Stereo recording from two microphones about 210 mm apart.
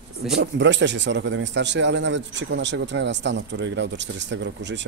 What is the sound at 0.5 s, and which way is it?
A man's voice, 55° right (ahead or behind).